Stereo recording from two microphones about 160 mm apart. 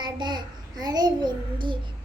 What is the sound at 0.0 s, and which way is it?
Child singing, 30° right (ahead or behind).